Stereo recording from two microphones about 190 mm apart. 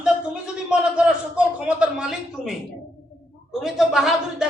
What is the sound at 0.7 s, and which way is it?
A man's voice, 5° right (ahead or behind).